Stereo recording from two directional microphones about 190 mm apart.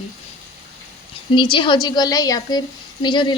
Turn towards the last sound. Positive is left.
turn(degrees=25)  # may be behind; listen again after turning